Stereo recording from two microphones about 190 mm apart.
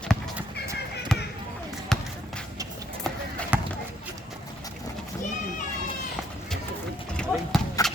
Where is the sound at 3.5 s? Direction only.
10° right (ahead or behind).